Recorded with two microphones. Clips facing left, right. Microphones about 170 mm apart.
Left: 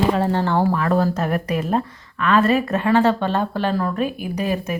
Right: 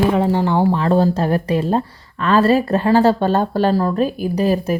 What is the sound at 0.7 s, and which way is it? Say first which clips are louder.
Speech: right 4 dB; 30° right (ahead or behind).